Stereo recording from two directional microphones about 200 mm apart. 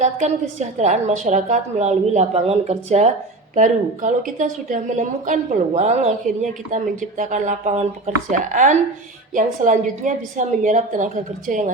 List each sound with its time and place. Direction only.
0.0 s a woman's voice: 35° right (ahead or behind)